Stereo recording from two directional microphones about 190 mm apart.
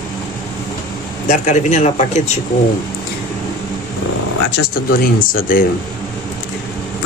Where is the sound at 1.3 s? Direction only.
40° left (ahead or behind).